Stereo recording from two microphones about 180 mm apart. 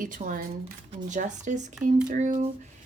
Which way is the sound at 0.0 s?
50° right (ahead or behind).